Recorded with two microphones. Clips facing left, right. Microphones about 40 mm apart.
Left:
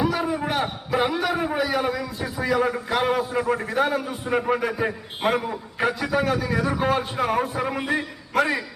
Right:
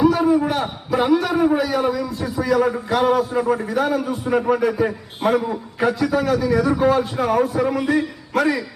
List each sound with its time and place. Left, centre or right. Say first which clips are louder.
0.1 s a sound: right 7 dB; centre
1.3 s a man's voice: right 5 dB; centre
3.5 s a man's voice: right 1 dB; left
4.0 s a man's voice: right 5 dB; centre; by 8.0 s left